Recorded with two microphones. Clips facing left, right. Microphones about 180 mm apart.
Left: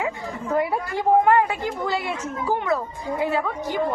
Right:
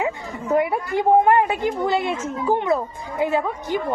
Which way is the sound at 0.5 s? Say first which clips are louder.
Right 4 dB; 20° right (ahead or behind).